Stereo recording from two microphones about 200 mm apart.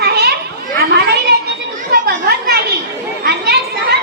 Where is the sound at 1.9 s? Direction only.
50° right (ahead or behind).